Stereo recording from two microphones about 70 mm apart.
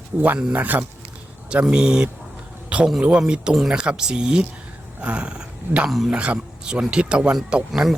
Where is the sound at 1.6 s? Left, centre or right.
Centre.